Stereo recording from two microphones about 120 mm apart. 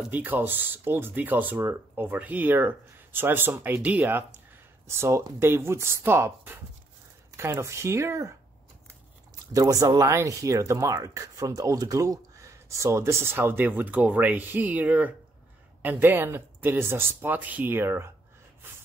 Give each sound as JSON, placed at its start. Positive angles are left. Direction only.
{"t": 0.1, "sound": "speech", "side_deg": -15}
{"t": 9.5, "sound": "speech", "side_deg": -30}